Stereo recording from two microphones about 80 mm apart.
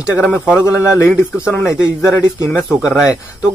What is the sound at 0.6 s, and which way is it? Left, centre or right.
Speech, left.